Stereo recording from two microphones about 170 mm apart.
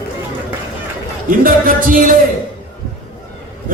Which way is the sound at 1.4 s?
55° right (ahead or behind).